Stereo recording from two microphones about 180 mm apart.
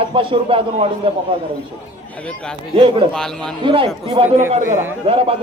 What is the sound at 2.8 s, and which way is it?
Speech, 30° right (ahead or behind).